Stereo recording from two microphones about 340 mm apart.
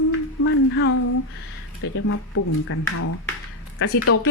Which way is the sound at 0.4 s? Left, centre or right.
Left.